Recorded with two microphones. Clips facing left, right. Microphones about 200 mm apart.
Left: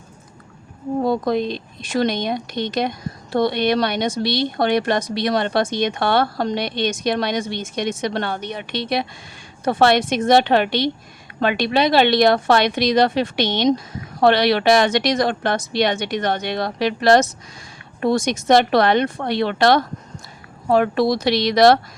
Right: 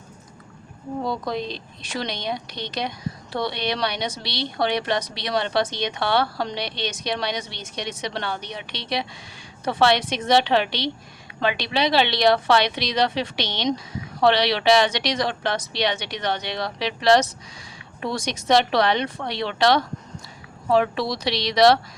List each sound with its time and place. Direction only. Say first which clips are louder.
1.0 s a woman's voice: left 7 dB; 50° left (ahead or behind)